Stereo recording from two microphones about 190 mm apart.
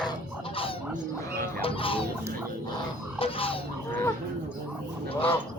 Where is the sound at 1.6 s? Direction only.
30° left (ahead or behind).